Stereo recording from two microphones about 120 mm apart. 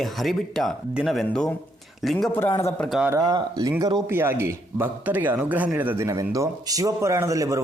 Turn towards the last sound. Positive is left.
turn(degrees=-25)  # may be behind; listen again after turning